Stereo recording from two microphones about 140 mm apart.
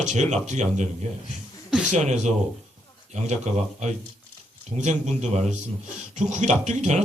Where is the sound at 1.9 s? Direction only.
55° right (ahead or behind).